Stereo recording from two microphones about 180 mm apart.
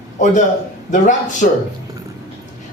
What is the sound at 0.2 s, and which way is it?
A man's voice, 45° left (ahead or behind).